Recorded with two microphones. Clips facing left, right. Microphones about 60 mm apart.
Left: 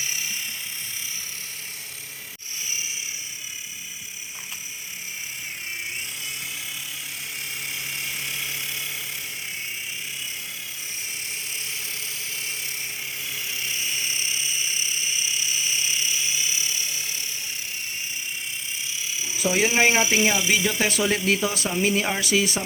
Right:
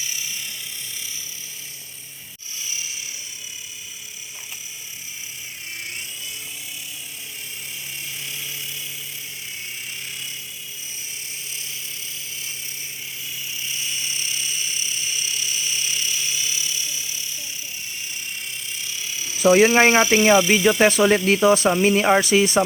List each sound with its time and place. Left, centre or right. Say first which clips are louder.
0.0 s ratchet: left 1 dB; left
7.7 s a sound: left 3 dB; left
11.5 s dental drill: left 2 dB; left
13.2 s helicopter: even; left
13.7 s mechanisms: even; left
18.9 s a sound: even; centre
19.4 s speech: right 9 dB; right
19.7 s speech: right 5 dB; right